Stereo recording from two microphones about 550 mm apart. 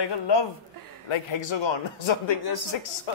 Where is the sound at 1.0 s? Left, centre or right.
Left.